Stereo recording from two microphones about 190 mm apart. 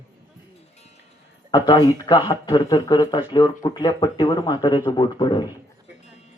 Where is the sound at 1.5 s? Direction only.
20° left (ahead or behind).